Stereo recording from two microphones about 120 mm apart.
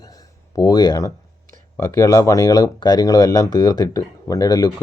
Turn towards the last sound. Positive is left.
turn(degrees=30)  # may be behind; listen again after turning